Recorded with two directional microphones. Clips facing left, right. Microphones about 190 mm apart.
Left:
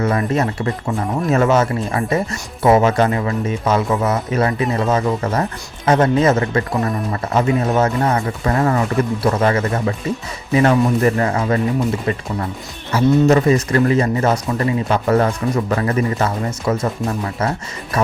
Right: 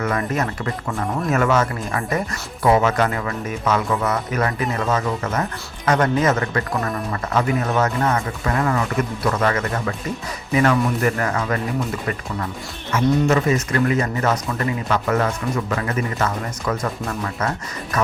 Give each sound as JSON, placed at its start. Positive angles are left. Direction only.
{"t": 0.0, "sound": "speech", "side_deg": 30}
{"t": 12.9, "sound": "speech", "side_deg": 35}